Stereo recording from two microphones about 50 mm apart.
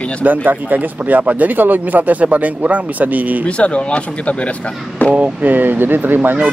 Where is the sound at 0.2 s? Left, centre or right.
Right.